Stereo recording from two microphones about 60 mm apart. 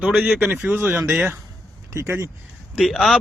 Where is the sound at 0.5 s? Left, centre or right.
Right.